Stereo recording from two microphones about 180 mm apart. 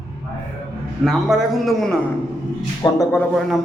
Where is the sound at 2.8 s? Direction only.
15° left (ahead or behind).